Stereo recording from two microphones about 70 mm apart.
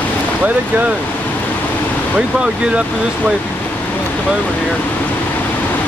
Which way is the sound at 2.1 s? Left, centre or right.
Centre.